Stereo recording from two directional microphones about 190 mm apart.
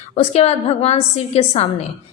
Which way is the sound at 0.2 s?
35° left (ahead or behind).